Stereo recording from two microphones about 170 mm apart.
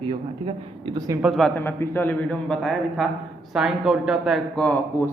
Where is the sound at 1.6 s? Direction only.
15° left (ahead or behind).